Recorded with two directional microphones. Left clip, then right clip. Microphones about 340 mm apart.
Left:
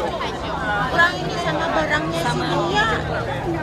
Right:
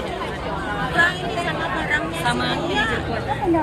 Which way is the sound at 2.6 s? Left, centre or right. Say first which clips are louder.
Left 5 dB; left.